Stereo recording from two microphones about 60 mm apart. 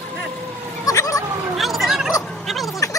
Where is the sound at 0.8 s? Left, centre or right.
Left.